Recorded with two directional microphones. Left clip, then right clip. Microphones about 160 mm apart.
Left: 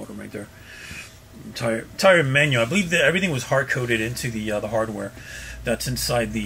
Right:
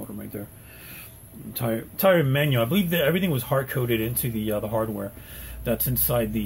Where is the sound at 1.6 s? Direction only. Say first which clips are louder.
Left 4 dB; 15° right (ahead or behind).